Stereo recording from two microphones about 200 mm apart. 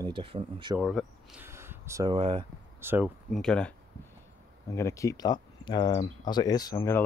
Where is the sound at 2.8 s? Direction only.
10° right (ahead or behind).